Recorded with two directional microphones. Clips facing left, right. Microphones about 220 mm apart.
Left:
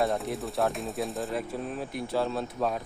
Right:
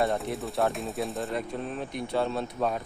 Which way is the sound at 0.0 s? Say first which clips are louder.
Even; centre (ahead or behind).